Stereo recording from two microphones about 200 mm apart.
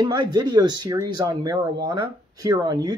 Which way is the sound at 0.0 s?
20° right (ahead or behind).